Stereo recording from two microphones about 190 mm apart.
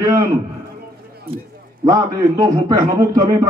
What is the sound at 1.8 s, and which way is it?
A man's voice, 20° right (ahead or behind).